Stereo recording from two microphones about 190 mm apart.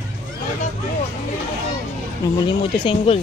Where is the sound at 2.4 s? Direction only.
30° left (ahead or behind).